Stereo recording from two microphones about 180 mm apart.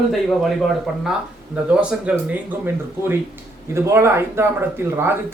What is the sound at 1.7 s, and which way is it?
Speech, 5° right (ahead or behind).